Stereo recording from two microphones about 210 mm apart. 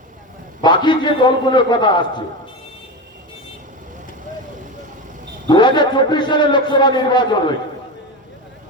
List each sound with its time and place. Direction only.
0.6 s a man's voice: 20° left (ahead or behind)
5.5 s a man's voice: 20° left (ahead or behind)